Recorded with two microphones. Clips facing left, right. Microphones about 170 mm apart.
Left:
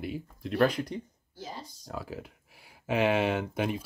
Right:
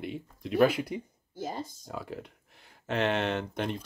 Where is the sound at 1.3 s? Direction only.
50° right (ahead or behind).